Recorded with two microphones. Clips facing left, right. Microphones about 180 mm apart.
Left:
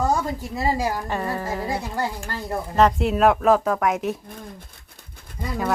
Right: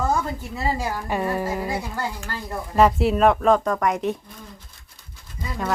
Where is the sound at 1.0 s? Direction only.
10° right (ahead or behind).